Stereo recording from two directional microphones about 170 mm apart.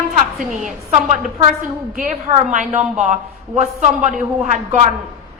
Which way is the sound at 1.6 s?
50° right (ahead or behind).